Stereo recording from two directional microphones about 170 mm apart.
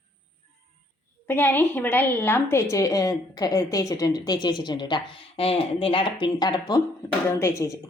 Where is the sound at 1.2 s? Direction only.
10° left (ahead or behind).